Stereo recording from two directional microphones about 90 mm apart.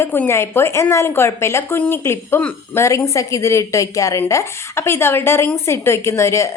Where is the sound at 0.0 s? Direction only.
25° left (ahead or behind).